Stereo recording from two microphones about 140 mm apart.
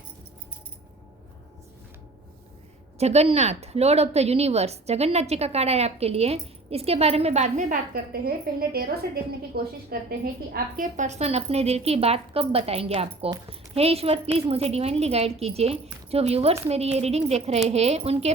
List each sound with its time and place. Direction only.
3.0 s a woman's voice: 50° right (ahead or behind)